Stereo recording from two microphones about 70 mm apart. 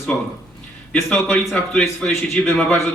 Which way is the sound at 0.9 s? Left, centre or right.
Centre.